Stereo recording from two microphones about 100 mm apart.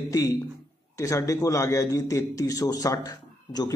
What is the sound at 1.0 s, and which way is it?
A man's voice, 30° left (ahead or behind).